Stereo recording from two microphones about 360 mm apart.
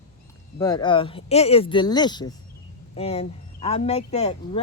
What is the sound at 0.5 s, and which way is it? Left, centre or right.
Speech, centre.